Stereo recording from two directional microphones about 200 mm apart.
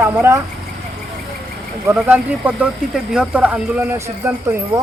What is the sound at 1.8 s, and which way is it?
Speech, 10° right (ahead or behind).